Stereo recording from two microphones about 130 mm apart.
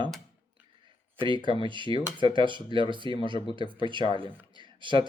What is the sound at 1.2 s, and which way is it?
Speech, 40° right (ahead or behind).